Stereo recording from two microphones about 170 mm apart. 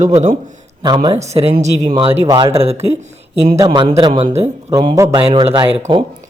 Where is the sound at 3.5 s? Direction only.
25° right (ahead or behind).